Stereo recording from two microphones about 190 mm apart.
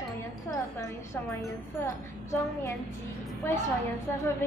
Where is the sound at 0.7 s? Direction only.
15° left (ahead or behind).